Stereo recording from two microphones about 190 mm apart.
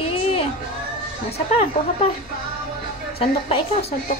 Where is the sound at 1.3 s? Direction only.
35° left (ahead or behind).